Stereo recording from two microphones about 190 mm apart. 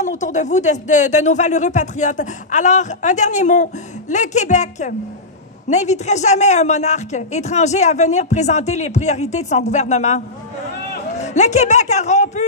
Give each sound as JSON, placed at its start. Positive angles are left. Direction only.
{"t": 0.0, "sound": "speech", "side_deg": 40}